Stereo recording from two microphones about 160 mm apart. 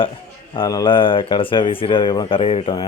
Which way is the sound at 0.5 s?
25° left (ahead or behind).